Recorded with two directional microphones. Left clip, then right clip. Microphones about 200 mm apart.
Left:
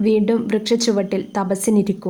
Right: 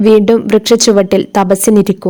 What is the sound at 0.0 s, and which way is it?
A woman's voice, 45° right (ahead or behind).